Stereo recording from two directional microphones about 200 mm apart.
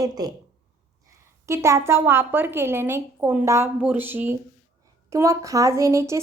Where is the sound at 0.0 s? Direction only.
20° right (ahead or behind).